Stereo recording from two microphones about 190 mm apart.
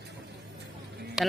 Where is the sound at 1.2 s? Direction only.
Centre (ahead or behind).